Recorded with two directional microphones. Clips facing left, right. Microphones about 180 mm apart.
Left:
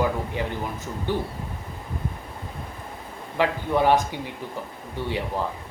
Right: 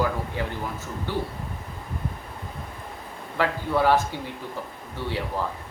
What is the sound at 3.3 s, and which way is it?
A man's voice, 20° left (ahead or behind).